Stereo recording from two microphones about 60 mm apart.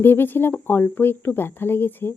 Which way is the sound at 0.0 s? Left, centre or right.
Left.